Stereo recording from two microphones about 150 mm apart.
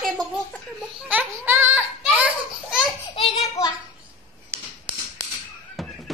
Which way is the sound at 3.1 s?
35° left (ahead or behind).